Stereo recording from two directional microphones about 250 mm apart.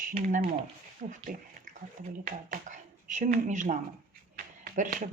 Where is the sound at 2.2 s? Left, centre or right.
Right.